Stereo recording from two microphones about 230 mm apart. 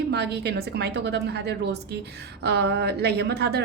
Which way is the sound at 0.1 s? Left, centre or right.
Right.